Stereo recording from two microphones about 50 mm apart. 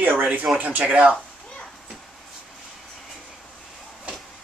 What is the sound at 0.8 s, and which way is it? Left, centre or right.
Speech, right.